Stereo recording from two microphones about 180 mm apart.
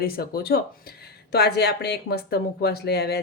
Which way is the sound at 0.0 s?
55° left (ahead or behind).